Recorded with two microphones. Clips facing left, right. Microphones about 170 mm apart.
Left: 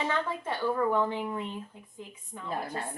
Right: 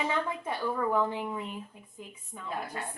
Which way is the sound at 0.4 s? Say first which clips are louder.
Left 2 dB; 5° right (ahead or behind).